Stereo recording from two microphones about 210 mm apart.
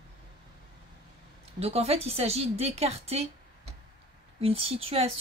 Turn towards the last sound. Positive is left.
turn(degrees=-25)  # may be behind; listen again after turning